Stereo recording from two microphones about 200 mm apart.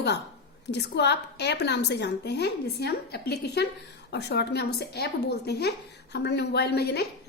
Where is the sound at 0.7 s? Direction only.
55° left (ahead or behind).